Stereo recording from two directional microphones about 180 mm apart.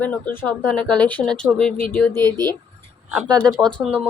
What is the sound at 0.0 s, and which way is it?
Speech, 10° left (ahead or behind).